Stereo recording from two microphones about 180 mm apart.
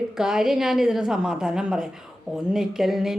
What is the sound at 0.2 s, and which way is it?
Speech, 5° right (ahead or behind).